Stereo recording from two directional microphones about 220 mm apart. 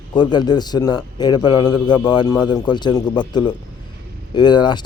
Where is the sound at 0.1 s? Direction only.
20° left (ahead or behind).